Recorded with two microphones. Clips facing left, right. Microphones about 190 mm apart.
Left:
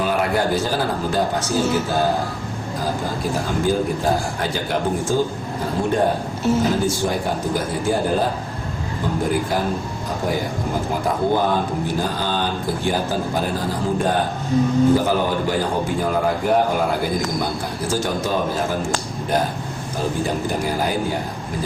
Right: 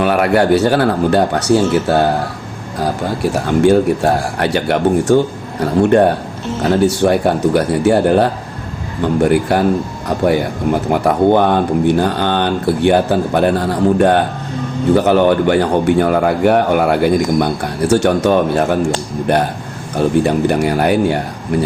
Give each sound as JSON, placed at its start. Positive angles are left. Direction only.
{"t": 0.0, "sound": "a man's voice", "side_deg": -70}
{"t": 3.3, "sound": "a man's voice", "side_deg": -70}
{"t": 10.9, "sound": "a man's voice", "side_deg": -70}